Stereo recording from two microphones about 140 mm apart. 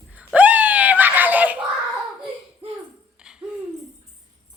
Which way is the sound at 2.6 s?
40° right (ahead or behind).